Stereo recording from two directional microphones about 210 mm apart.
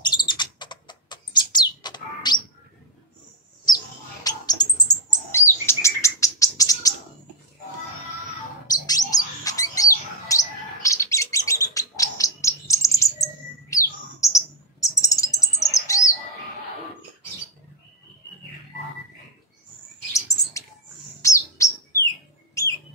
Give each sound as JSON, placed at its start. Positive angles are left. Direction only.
{"t": 0.0, "sound": "bird", "side_deg": 20}
{"t": 3.6, "sound": "bird", "side_deg": 20}
{"t": 8.6, "sound": "bird", "side_deg": 15}
{"t": 14.2, "sound": "chirp", "side_deg": 15}
{"t": 20.1, "sound": "chirp", "side_deg": 15}
{"t": 21.2, "sound": "bird", "side_deg": 15}